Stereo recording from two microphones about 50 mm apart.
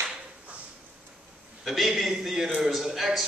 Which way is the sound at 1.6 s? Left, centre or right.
Centre.